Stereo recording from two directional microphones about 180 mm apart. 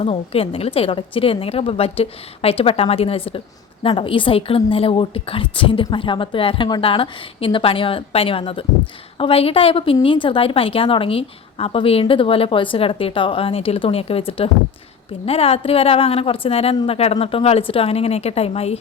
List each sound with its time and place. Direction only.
0.0 s a woman's voice: 35° left (ahead or behind)